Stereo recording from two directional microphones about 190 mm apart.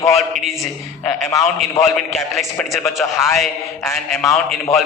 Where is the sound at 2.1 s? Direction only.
Centre (ahead or behind).